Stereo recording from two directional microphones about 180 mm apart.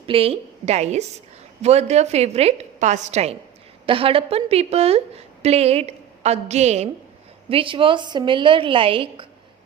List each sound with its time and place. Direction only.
0.0 s a woman's voice: 30° right (ahead or behind)